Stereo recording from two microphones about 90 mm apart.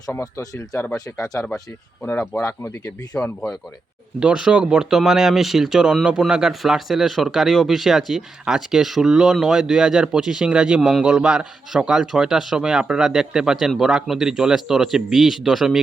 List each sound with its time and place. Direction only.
0.1 s speech: 25° left (ahead or behind)
1.4 s speech: 10° left (ahead or behind)
2.5 s speech: 25° left (ahead or behind)
3.2 s speech: 5° left (ahead or behind)
4.2 s speech: 10° right (ahead or behind)